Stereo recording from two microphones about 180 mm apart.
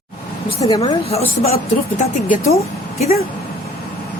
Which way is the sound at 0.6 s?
25° left (ahead or behind).